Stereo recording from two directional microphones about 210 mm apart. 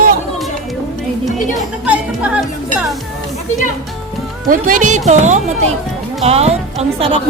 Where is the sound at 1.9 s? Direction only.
5° right (ahead or behind).